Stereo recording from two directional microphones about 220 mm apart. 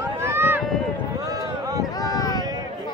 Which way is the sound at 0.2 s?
10° right (ahead or behind).